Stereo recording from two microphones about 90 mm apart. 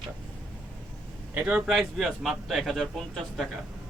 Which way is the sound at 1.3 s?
15° right (ahead or behind).